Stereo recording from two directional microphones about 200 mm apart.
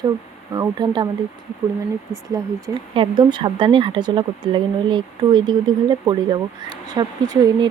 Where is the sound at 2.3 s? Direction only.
20° right (ahead or behind).